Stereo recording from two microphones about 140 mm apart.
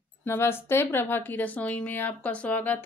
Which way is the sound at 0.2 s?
15° left (ahead or behind).